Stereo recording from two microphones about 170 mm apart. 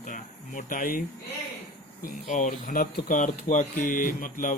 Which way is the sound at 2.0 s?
50° left (ahead or behind).